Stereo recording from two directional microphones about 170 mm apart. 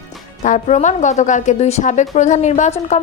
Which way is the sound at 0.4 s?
45° left (ahead or behind).